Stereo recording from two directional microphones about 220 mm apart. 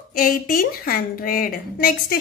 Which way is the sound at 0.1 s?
40° left (ahead or behind).